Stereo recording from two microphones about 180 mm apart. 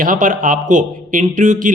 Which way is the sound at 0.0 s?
45° right (ahead or behind).